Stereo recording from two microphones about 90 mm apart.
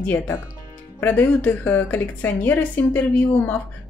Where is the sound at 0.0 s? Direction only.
20° left (ahead or behind).